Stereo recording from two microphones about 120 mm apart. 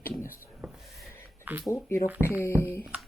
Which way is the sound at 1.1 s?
20° left (ahead or behind).